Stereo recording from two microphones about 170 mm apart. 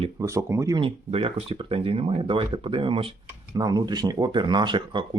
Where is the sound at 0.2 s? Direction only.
20° right (ahead or behind).